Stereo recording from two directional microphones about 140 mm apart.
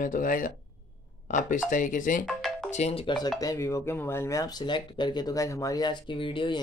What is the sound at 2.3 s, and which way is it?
Music, centre (ahead or behind).